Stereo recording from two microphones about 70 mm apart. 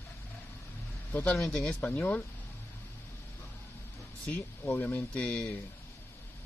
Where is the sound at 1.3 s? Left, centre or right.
Centre.